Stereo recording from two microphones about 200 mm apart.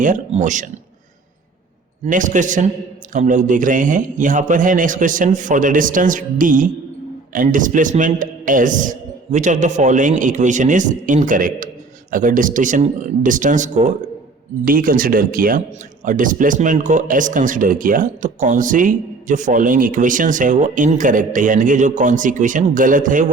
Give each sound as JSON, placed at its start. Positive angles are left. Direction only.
{"t": 0.0, "sound": "speech", "side_deg": -40}
{"t": 2.0, "sound": "speech", "side_deg": -40}